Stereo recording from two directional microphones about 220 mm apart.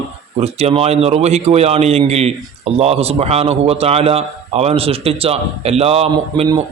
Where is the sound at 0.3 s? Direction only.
30° right (ahead or behind).